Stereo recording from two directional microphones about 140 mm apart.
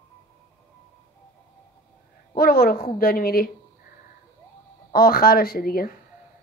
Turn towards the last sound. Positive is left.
turn(degrees=90)